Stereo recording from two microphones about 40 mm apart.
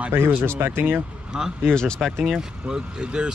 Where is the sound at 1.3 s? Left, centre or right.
Centre.